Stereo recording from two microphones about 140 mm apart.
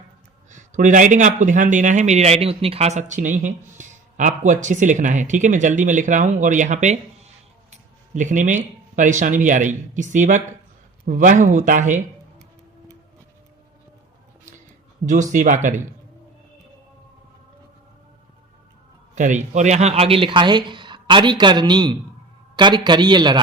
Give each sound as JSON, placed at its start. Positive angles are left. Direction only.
{"t": 0.5, "sound": "speech", "side_deg": -65}
{"t": 15.0, "sound": "speech", "side_deg": -60}
{"t": 19.1, "sound": "speech", "side_deg": -60}